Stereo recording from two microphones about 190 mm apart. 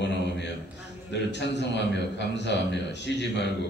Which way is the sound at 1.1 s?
65° left (ahead or behind).